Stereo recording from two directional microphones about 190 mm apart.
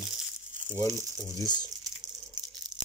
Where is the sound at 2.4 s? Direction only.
20° right (ahead or behind).